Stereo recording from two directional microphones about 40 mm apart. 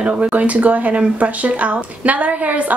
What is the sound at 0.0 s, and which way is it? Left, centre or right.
A woman's voice, right.